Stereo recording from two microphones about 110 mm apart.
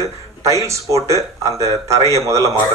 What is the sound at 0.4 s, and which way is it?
A man's voice, 30° right (ahead or behind).